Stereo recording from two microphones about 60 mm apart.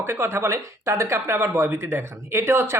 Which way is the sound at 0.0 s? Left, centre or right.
Right.